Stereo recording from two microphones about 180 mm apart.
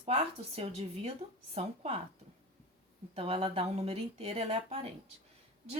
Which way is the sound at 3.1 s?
30° right (ahead or behind).